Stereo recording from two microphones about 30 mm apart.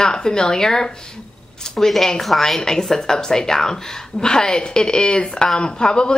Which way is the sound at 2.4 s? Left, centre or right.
Centre.